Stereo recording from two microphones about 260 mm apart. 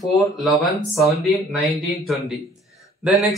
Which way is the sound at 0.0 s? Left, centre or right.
Centre.